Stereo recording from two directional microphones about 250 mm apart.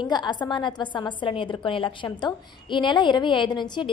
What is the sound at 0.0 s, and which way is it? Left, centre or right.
A woman's voice, centre.